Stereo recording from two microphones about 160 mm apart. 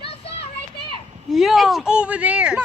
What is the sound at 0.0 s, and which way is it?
Children playing, 40° left (ahead or behind).